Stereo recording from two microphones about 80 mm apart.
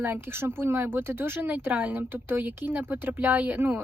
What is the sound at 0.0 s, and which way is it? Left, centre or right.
Speech, right.